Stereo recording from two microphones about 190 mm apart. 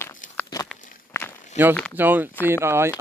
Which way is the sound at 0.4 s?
20° left (ahead or behind).